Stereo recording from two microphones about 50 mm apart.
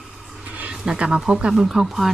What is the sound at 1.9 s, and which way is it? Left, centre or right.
Speech, centre.